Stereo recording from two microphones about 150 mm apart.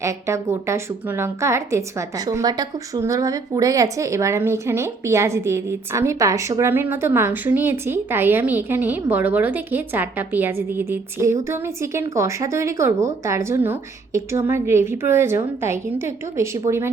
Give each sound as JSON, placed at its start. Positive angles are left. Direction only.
{"t": 0.0, "sound": "a woman's voice", "side_deg": -20}